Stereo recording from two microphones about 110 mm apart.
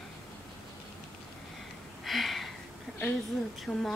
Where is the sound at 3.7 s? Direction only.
5° left (ahead or behind).